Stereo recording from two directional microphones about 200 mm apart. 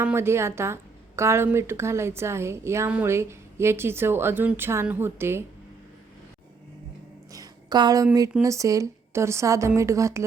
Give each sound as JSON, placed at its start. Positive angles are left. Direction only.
{"t": 0.0, "sound": "a woman's voice", "side_deg": -10}
{"t": 7.3, "sound": "a sound", "side_deg": -20}
{"t": 8.4, "sound": "a woman's voice", "side_deg": -15}